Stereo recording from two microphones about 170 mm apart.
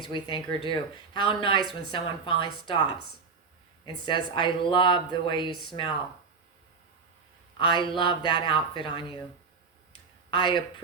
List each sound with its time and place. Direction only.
0.0 s speech: 30° left (ahead or behind)
7.7 s speech: 30° left (ahead or behind)
10.3 s speech: 30° left (ahead or behind)